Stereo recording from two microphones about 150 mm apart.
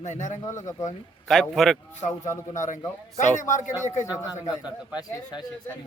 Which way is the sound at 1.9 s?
55° left (ahead or behind).